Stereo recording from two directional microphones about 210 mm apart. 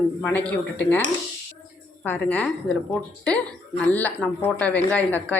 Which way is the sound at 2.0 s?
5° left (ahead or behind).